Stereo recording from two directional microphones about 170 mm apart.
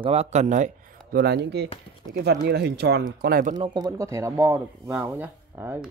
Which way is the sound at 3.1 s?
60° right (ahead or behind).